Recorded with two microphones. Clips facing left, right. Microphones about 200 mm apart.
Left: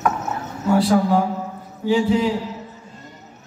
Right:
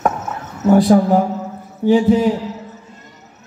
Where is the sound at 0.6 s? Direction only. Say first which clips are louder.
Right 6 dB; 45° right (ahead or behind).